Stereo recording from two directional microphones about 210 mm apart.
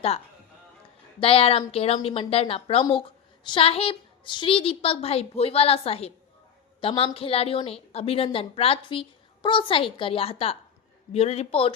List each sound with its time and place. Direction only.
1.2 s a woman's voice: 25° left (ahead or behind)